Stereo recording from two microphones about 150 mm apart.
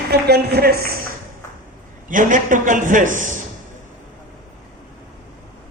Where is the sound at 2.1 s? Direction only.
60° right (ahead or behind).